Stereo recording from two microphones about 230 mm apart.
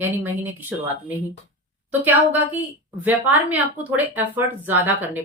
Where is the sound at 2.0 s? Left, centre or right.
Centre.